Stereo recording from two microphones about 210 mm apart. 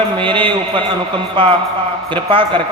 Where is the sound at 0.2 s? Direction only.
25° right (ahead or behind).